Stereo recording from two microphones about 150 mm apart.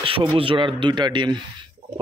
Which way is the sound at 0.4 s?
35° right (ahead or behind).